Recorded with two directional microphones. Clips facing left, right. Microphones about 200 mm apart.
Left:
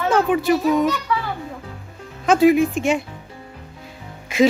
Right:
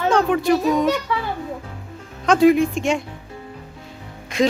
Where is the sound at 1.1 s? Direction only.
25° right (ahead or behind).